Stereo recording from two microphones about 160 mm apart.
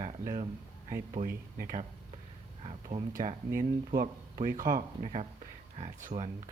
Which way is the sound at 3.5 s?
65° right (ahead or behind).